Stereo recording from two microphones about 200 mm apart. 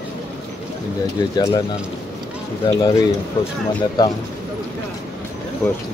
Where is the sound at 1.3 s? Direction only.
15° left (ahead or behind).